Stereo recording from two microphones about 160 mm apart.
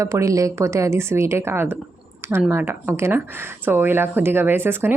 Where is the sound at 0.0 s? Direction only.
20° right (ahead or behind).